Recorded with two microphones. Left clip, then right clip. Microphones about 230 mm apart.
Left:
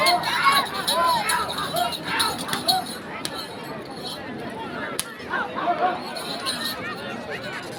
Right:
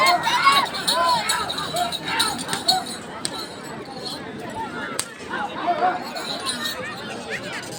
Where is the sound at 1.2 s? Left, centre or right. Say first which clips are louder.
Even; centre.